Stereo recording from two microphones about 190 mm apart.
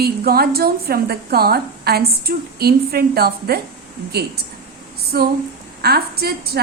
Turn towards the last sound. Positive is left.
turn(degrees=-55)  # may be behind; listen again after turning